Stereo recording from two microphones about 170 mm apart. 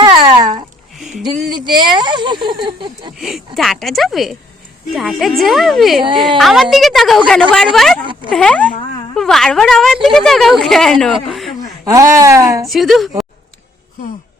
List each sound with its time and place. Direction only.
0.0 s babbling: 25° right (ahead or behind)
1.5 s speech: 25° right (ahead or behind)
3.2 s a man's voice: centre (ahead or behind)
11.9 s speech: 20° right (ahead or behind)
12.6 s speech: centre (ahead or behind)